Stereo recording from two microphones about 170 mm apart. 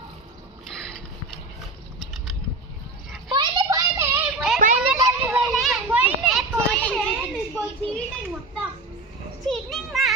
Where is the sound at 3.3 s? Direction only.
25° right (ahead or behind); by 4.6 s 5° right (ahead or behind).